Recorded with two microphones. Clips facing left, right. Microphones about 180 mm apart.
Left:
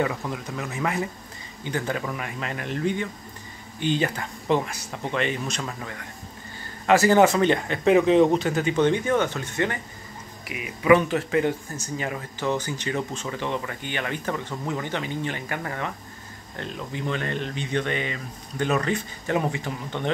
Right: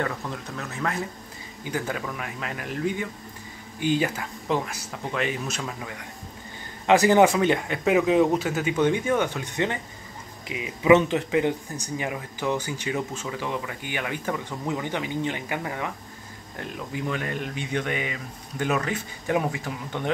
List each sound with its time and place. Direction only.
0.0 s speech: 10° left (ahead or behind)
1.6 s speech: 5° right (ahead or behind)